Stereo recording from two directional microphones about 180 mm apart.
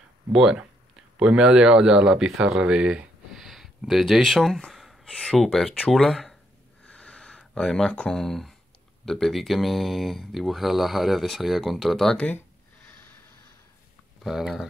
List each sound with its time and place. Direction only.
0.3 s speech: 5° right (ahead or behind)
6.9 s a sound: 5° left (ahead or behind)
9.0 s speech: centre (ahead or behind)
14.2 s speech: centre (ahead or behind)